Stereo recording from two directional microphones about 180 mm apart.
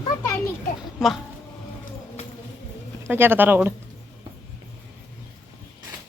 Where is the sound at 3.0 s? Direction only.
10° right (ahead or behind).